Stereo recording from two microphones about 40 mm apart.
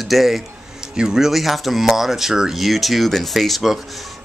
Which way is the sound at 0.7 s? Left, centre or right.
Centre.